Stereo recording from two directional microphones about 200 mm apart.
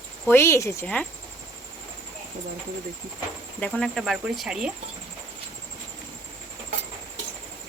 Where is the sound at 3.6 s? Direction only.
5° left (ahead or behind).